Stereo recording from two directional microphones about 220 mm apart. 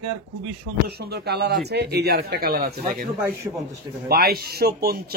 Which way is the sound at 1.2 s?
50° right (ahead or behind).